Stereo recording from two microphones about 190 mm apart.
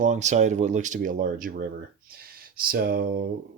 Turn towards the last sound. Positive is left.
turn(degrees=-50)  # may be behind; listen again after turning